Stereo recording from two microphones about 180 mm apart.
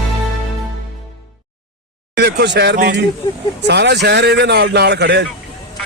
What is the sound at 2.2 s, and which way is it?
A man's voice, 70° right (ahead or behind).